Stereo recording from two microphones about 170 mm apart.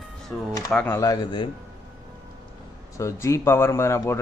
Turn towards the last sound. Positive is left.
turn(degrees=15)  # may be behind; listen again after turning